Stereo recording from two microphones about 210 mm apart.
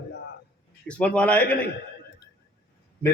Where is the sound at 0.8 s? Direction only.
5° left (ahead or behind).